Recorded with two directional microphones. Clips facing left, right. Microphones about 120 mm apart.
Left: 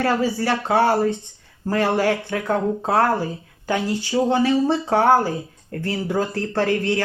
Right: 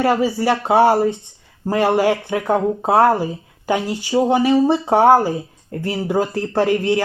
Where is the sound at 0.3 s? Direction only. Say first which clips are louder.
Right 4 dB; 15° right (ahead or behind).